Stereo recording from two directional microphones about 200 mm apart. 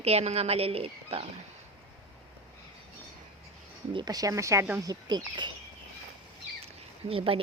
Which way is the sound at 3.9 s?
20° right (ahead or behind).